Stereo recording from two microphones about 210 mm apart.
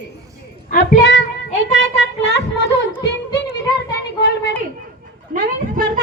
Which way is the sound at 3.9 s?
50° left (ahead or behind).